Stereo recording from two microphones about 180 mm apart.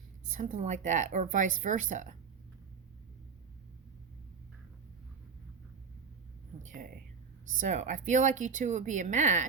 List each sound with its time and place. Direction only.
0.3 s speech: 45° right (ahead or behind)
7.6 s speech: 40° right (ahead or behind)